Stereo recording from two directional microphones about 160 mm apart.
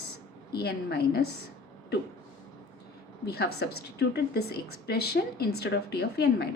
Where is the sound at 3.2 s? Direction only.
90° left.